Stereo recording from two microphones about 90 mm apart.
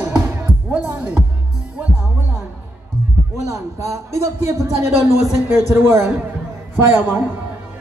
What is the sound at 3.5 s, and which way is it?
A man's voice, 35° right (ahead or behind).